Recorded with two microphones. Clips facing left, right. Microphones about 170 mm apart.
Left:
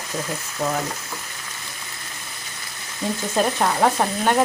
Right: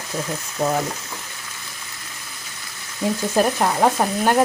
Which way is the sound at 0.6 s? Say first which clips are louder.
Right 3 dB; 25° right (ahead or behind).